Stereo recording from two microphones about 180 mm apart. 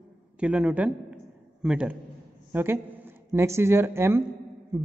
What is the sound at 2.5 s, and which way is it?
A woman's voice, 10° right (ahead or behind).